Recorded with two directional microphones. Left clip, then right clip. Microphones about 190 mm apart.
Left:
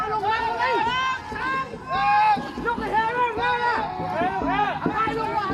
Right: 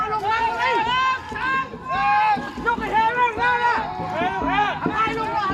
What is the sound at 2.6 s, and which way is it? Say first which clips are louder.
Run: right 4 dB; 20° right (ahead or behind).